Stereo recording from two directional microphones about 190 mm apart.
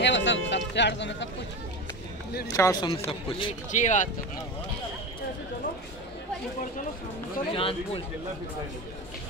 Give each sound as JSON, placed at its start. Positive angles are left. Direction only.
{"t": 0.0, "sound": "a sound", "side_deg": 75}
{"t": 2.5, "sound": "speech", "side_deg": 20}
{"t": 3.7, "sound": "speech", "side_deg": 40}
{"t": 7.5, "sound": "speech", "side_deg": 30}